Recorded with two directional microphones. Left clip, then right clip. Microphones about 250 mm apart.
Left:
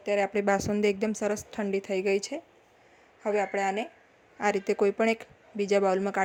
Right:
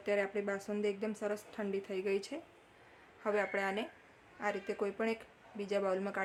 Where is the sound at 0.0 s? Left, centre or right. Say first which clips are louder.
Left 7 dB; centre.